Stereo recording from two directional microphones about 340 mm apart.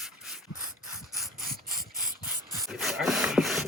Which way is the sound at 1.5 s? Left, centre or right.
Right.